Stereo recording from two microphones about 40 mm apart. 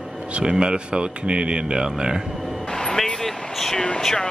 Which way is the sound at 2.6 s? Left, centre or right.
Centre.